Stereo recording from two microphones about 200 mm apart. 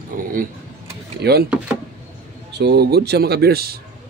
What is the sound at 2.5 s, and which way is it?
Speech, 55° right (ahead or behind).